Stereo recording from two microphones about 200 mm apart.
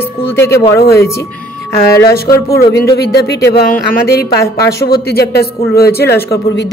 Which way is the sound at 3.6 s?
50° left (ahead or behind).